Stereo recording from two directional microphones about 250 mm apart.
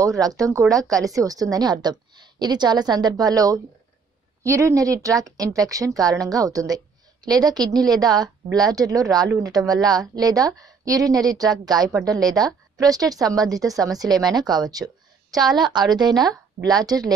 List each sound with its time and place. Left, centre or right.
0.0 s speech: centre